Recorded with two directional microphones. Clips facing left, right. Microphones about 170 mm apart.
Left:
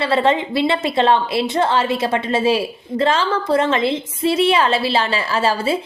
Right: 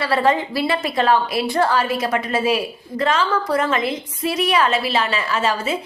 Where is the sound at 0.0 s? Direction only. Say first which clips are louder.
Left 1 dB; 25° left (ahead or behind).